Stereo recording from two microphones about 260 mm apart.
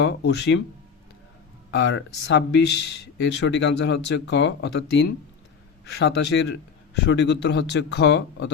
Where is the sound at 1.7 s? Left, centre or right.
Left.